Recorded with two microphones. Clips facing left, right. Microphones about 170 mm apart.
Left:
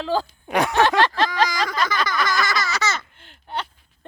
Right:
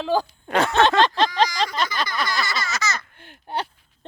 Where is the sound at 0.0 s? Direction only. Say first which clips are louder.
Right 1 dB; 15° right (ahead or behind).